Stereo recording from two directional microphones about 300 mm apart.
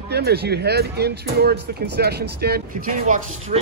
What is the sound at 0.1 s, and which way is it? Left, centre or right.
Speech, right.